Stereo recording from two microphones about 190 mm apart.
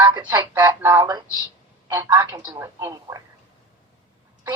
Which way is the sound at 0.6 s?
10° right (ahead or behind).